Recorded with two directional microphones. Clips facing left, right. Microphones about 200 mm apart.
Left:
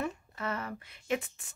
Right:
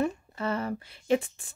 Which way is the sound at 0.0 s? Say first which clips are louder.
Right 6 dB; 30° right (ahead or behind).